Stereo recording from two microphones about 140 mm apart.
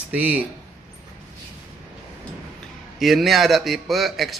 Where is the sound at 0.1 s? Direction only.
10° right (ahead or behind).